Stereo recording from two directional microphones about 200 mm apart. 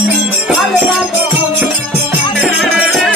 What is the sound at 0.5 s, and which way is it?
Music, 5° right (ahead or behind).